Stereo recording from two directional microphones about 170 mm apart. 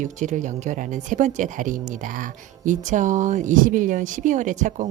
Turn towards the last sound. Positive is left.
turn(degrees=-50)  # may be behind; listen again after turning